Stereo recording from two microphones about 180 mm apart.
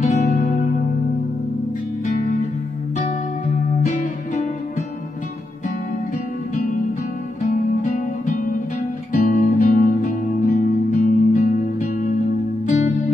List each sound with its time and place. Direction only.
0.0 s music: 45° left (ahead or behind)
3.9 s music: 45° left (ahead or behind)
7.4 s music: 45° left (ahead or behind)